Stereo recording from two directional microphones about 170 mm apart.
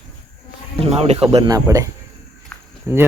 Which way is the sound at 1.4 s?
20° right (ahead or behind).